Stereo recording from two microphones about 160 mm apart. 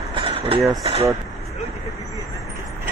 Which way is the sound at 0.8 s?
40° right (ahead or behind).